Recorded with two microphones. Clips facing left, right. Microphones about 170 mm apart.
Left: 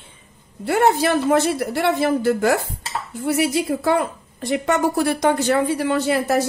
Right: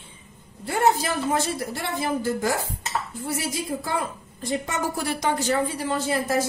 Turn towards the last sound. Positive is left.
turn(degrees=70)  # may be behind; listen again after turning